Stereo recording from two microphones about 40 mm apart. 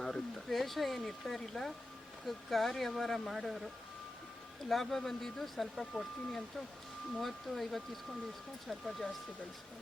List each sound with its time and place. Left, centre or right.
0.0 s a sound: centre
0.5 s speech: centre
7.2 s speech: centre